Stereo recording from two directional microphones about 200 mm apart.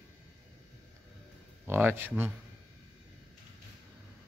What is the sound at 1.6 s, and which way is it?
Speech, 10° right (ahead or behind).